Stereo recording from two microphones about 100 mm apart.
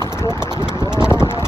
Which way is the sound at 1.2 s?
25° left (ahead or behind).